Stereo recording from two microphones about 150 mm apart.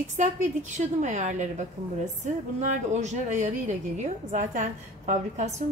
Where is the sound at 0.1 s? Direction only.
50° right (ahead or behind).